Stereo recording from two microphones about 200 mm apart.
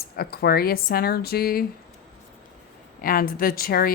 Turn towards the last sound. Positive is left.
turn(degrees=50)  # may be behind; listen again after turning